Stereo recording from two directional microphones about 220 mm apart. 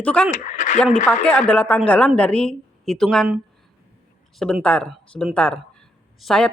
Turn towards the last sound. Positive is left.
turn(degrees=0)  # may be behind; listen again after turning